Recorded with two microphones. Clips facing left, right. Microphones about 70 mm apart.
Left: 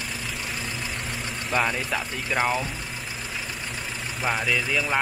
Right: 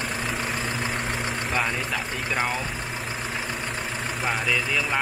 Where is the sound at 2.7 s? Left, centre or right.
Right.